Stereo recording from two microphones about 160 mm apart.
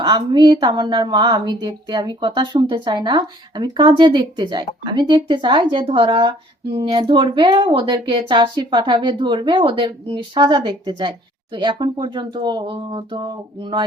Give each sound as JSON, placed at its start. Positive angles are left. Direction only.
{"t": 0.0, "sound": "a woman's voice", "side_deg": -30}